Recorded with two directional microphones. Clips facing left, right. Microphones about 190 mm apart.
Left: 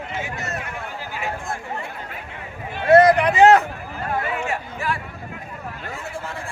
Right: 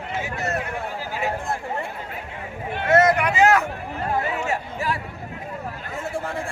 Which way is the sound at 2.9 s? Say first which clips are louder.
Left 5 dB; 35° left (ahead or behind).